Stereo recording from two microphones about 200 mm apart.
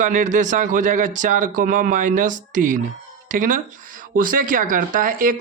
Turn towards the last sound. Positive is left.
turn(degrees=-40)  # may be behind; listen again after turning